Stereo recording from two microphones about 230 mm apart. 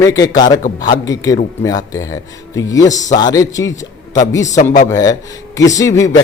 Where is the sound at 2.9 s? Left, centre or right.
Left.